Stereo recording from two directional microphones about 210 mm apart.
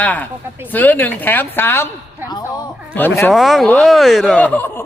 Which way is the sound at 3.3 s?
Centre (ahead or behind).